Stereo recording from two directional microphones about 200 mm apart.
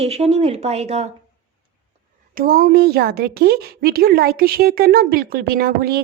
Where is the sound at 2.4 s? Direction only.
45° right (ahead or behind).